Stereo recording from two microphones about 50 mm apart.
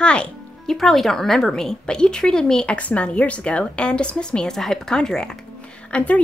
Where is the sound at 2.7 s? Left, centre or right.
Left.